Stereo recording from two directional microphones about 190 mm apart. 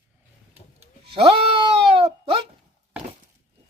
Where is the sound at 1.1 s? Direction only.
30° right (ahead or behind).